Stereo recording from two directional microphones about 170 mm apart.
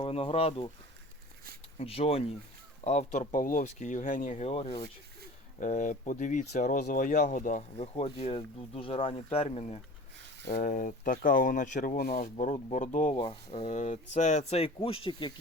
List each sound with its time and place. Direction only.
0.0 s speech: 35° left (ahead or behind)
1.8 s speech: 35° left (ahead or behind)
5.5 s speech: 50° left (ahead or behind)
10.6 s speech: 50° left (ahead or behind)
13.2 s speech: 35° left (ahead or behind)